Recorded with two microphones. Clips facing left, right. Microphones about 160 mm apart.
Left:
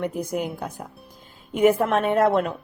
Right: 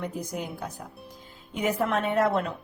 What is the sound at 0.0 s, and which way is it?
A woman's voice, 55° left (ahead or behind).